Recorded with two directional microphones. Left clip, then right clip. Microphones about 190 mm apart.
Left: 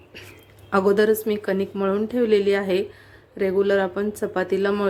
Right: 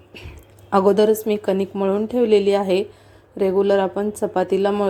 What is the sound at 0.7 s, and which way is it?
A woman's voice, 10° right (ahead or behind).